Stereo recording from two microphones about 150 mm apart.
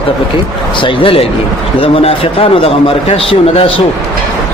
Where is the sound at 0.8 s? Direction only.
35° left (ahead or behind).